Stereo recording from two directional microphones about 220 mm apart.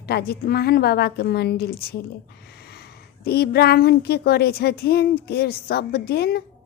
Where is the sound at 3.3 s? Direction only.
45° left (ahead or behind).